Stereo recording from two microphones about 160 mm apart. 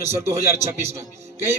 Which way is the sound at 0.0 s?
40° right (ahead or behind).